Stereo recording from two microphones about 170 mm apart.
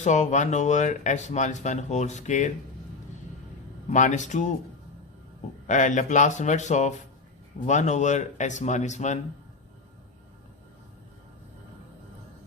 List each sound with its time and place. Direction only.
0.0 s speech: 45° left (ahead or behind)
3.8 s speech: 45° left (ahead or behind)
5.6 s speech: 45° left (ahead or behind)